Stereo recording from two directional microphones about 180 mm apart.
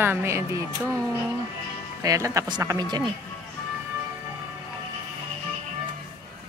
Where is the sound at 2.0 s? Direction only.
20° right (ahead or behind).